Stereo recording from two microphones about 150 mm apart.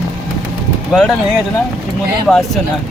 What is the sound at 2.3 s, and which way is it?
Speech, centre (ahead or behind).